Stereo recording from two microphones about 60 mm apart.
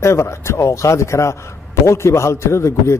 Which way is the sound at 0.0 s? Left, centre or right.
Left.